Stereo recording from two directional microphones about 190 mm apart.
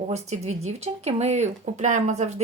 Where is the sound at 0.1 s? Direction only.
35° right (ahead or behind).